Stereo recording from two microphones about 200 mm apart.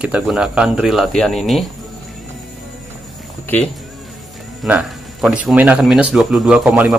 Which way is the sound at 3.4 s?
10° left (ahead or behind).